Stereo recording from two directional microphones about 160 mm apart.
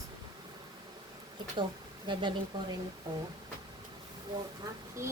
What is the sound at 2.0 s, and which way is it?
Speech, 30° right (ahead or behind).